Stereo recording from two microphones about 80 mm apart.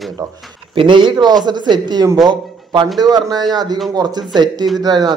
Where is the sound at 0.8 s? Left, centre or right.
Right.